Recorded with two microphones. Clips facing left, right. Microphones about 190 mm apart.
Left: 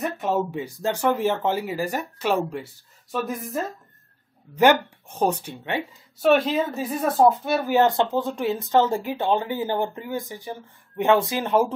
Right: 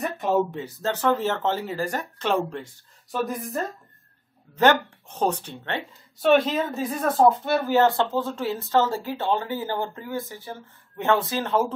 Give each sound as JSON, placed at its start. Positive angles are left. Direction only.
{"t": 0.0, "sound": "speech", "side_deg": 0}